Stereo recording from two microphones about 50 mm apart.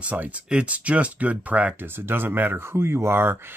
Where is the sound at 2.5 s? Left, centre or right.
Right.